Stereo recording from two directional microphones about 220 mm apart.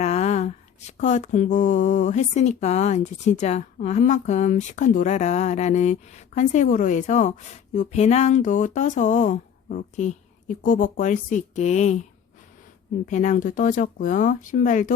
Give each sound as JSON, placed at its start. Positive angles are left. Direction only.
{"t": 0.0, "sound": "speech", "side_deg": 30}
{"t": 13.1, "sound": "speech", "side_deg": 35}